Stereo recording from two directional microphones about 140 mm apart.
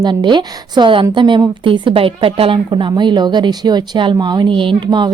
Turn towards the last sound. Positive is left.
turn(degrees=-30)  # may be behind; listen again after turning